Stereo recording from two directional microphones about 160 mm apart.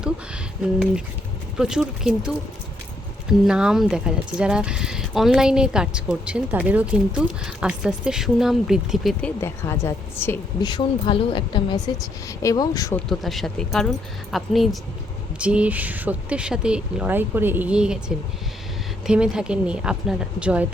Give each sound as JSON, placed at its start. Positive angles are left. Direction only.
{"t": 1.5, "sound": "speech", "side_deg": -5}
{"t": 9.2, "sound": "a woman's voice", "side_deg": 15}
{"t": 10.6, "sound": "speech", "side_deg": 25}
{"t": 13.1, "sound": "speech", "side_deg": 0}
{"t": 19.0, "sound": "speech", "side_deg": -5}